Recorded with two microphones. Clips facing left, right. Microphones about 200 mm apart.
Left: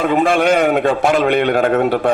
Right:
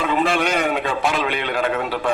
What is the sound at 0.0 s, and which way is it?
A man's voice, 50° left (ahead or behind).